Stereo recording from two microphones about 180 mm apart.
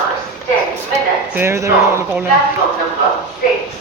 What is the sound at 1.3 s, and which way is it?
Speech, 15° right (ahead or behind).